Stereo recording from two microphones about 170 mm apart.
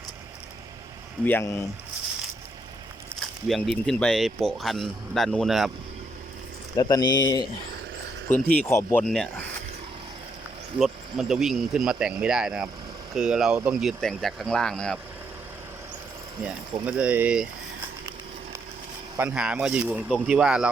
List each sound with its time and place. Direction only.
1.2 s speech: 10° left (ahead or behind)
3.5 s speech: centre (ahead or behind)
6.7 s speech: 25° left (ahead or behind)
8.3 s speech: 10° left (ahead or behind)
9.0 s speech: centre (ahead or behind)
10.8 s speech: centre (ahead or behind)
16.8 s speech: 10° right (ahead or behind)
19.3 s speech: 5° right (ahead or behind)